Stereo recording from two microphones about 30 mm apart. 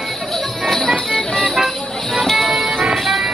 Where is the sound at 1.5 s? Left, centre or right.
Centre.